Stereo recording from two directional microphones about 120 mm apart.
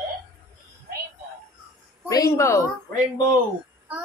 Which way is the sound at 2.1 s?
25° left (ahead or behind).